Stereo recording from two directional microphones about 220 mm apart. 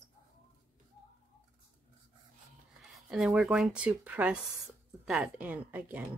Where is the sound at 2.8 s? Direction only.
Centre (ahead or behind).